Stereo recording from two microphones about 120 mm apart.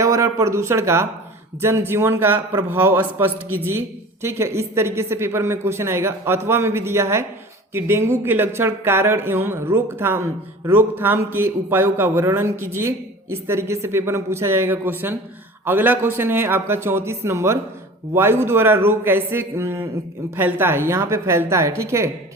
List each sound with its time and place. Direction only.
0.0 s a man's voice: 25° right (ahead or behind)